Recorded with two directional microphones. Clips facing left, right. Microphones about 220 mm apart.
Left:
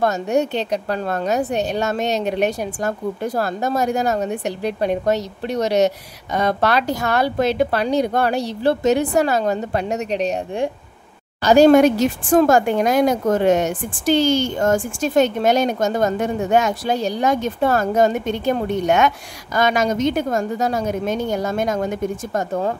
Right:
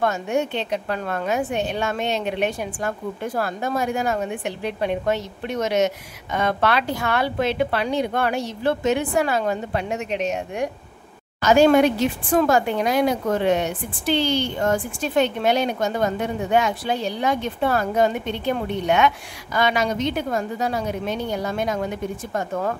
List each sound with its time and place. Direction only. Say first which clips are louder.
0.0 s a woman's voice: left 4 dB; 40° left (ahead or behind)